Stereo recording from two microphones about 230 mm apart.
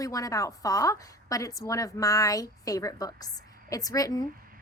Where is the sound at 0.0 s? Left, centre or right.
Centre.